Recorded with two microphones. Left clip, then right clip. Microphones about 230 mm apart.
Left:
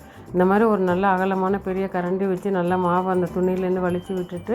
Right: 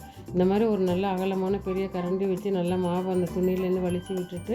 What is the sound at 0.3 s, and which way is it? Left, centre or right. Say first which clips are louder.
Speech: left 6 dB; centre.